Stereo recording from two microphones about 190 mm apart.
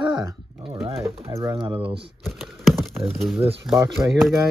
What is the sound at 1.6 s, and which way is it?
Speech, 25° right (ahead or behind).